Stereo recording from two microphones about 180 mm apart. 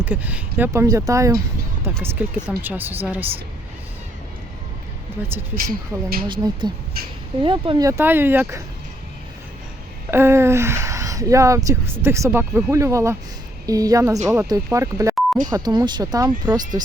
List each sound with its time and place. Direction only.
0.0 s speech: 10° right (ahead or behind)
5.9 s speech: 15° right (ahead or behind)
6.2 s speech: 25° right (ahead or behind)
7.9 s speech: 10° right (ahead or behind)
10.1 s speech: 15° right (ahead or behind)